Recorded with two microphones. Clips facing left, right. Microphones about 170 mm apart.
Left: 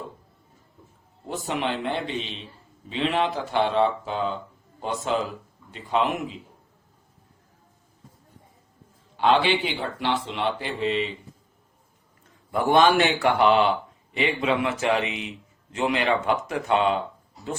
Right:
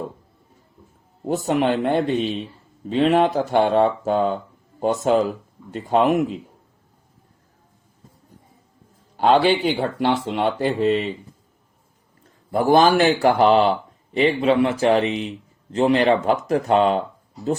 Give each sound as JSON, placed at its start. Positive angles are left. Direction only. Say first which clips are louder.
{"t": 1.5, "sound": "speech", "louder": "right 7 dB", "side_deg": -45}
{"t": 9.1, "sound": "speech", "louder": "right 4 dB", "side_deg": -45}
{"t": 12.5, "sound": "speech", "louder": "right 3 dB", "side_deg": -35}